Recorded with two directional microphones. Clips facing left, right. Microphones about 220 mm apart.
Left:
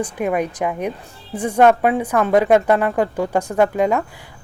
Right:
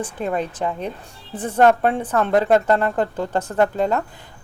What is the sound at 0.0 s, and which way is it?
A woman's voice, 15° left (ahead or behind).